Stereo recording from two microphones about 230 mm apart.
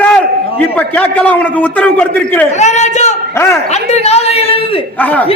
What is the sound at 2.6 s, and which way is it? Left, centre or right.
Speech, left.